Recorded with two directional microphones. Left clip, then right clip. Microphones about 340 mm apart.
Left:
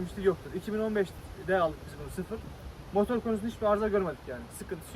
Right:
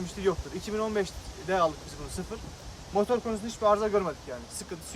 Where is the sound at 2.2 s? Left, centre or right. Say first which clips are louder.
Left 2 dB; centre.